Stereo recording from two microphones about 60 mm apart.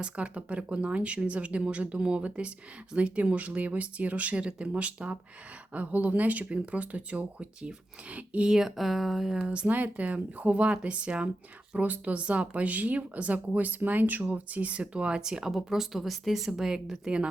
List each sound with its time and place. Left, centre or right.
0.0 s speech: right
8.4 s speech: centre